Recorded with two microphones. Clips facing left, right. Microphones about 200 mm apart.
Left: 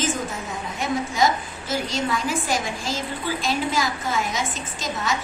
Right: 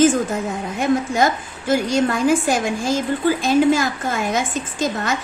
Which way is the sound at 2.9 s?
50° right (ahead or behind).